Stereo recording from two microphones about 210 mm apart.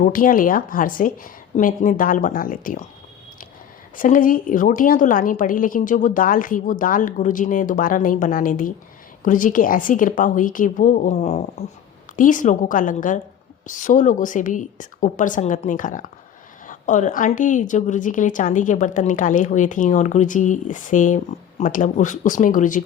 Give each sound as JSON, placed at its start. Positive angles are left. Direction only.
{"t": 0.0, "sound": "a woman's voice", "side_deg": 40}
{"t": 3.9, "sound": "a woman's voice", "side_deg": 40}